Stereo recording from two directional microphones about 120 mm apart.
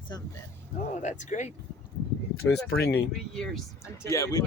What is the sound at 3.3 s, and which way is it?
Speech, 5° left (ahead or behind).